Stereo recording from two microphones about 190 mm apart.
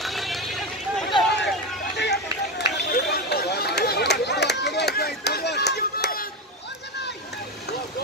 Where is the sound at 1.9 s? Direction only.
65° left (ahead or behind).